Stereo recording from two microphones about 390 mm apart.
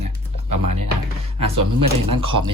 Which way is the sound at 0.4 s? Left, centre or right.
Right.